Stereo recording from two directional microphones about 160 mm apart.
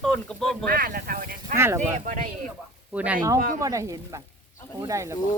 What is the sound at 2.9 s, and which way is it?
Speech, 10° right (ahead or behind).